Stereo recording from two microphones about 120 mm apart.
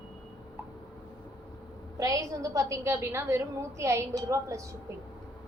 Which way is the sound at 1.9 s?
30° right (ahead or behind).